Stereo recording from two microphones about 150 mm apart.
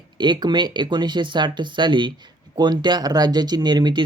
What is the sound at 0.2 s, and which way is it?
Speech, 30° right (ahead or behind).